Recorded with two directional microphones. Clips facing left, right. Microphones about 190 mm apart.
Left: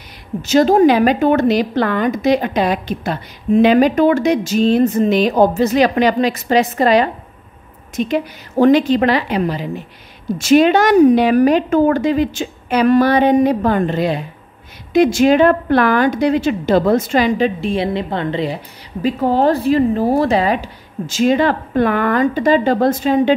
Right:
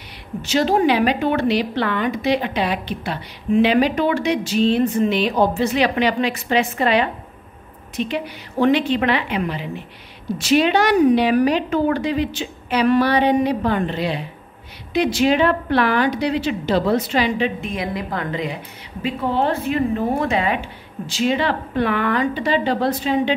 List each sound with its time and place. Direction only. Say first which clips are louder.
0.4 s a woman's voice: left 7 dB; 45° left (ahead or behind)